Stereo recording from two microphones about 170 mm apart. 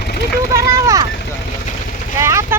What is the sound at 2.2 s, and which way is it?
Vehicle, 15° right (ahead or behind).